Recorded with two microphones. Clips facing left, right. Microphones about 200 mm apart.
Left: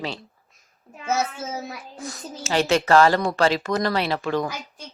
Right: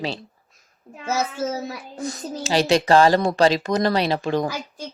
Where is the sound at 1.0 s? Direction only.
35° right (ahead or behind).